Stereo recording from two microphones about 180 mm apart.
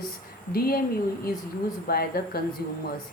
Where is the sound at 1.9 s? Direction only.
55° left (ahead or behind).